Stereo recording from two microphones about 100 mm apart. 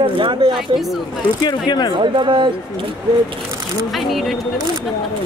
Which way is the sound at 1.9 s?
50° right (ahead or behind).